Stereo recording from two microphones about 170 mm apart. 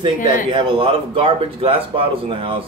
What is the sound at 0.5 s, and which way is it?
Speech, 30° right (ahead or behind).